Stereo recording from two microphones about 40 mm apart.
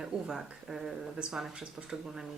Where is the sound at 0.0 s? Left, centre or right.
Centre.